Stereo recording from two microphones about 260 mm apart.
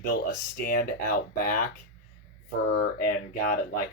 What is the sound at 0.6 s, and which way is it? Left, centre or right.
Speech, left.